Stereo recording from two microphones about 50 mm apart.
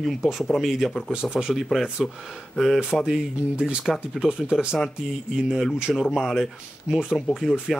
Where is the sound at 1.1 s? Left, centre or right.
Centre.